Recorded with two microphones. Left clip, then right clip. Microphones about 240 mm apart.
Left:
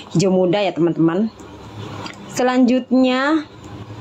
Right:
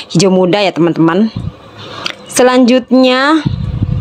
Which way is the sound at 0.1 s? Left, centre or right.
Right.